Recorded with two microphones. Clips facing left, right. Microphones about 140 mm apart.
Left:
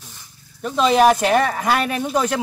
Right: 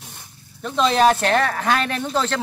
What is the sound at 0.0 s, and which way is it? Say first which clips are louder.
Zipper: right 2 dB; 60° right (ahead or behind).